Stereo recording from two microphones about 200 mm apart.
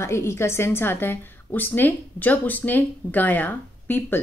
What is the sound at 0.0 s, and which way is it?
A woman's voice, 15° left (ahead or behind).